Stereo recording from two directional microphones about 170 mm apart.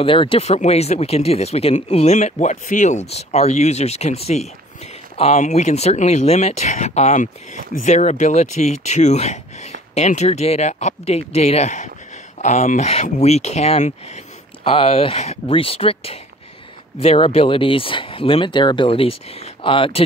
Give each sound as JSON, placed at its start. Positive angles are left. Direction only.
{"t": 0.0, "sound": "speech", "side_deg": 30}